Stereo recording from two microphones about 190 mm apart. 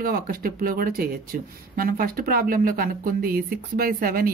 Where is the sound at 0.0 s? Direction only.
50° right (ahead or behind).